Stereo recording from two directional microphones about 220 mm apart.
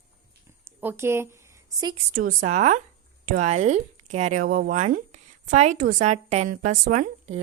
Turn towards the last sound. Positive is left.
turn(degrees=-35)  # may be behind; listen again after turning